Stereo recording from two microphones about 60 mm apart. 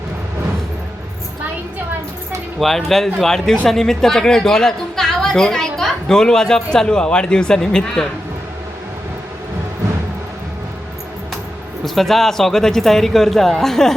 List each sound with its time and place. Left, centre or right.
2.6 s speech: centre
11.9 s a man's voice: centre